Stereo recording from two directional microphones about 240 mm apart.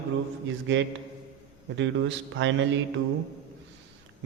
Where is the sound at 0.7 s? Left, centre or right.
Right.